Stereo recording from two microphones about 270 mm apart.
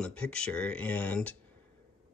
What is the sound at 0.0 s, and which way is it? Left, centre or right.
Speech, centre.